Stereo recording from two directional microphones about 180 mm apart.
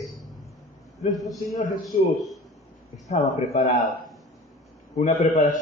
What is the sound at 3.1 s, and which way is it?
Speech, 45° left (ahead or behind).